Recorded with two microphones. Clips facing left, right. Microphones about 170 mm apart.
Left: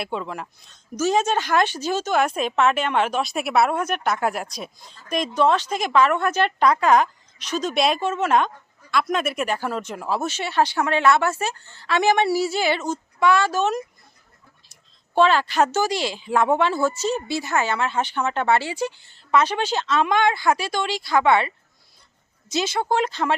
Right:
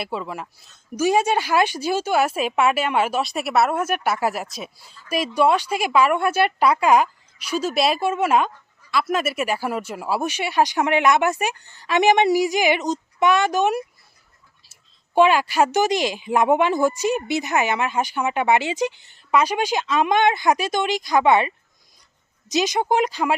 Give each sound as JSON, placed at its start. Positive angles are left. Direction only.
{"t": 0.0, "sound": "a woman's voice", "side_deg": -5}